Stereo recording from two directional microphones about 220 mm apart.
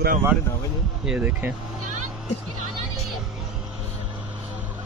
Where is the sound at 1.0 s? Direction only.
5° right (ahead or behind).